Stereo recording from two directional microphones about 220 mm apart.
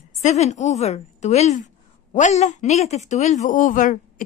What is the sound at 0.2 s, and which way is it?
A woman's voice, 30° left (ahead or behind).